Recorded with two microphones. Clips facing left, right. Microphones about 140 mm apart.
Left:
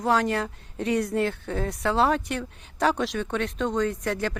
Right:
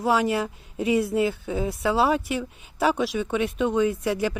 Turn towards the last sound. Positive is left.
turn(degrees=-10)  # may be behind; listen again after turning